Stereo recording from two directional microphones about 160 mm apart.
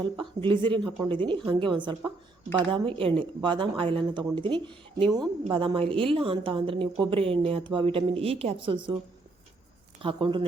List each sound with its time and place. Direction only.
0.2 s a woman's voice: 30° right (ahead or behind)
10.0 s a woman's voice: 30° right (ahead or behind)